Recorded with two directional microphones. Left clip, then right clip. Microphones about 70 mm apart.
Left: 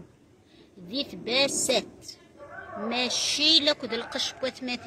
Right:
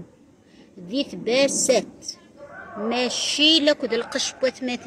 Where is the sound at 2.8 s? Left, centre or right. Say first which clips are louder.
Right 4 dB; right.